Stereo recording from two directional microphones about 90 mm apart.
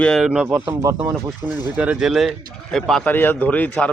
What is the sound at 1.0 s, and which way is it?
Speech, 20° right (ahead or behind).